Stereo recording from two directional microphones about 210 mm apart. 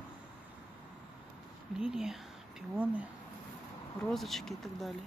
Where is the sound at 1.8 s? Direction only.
5° right (ahead or behind).